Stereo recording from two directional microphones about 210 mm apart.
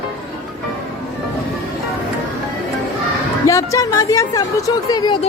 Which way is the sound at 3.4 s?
15° left (ahead or behind).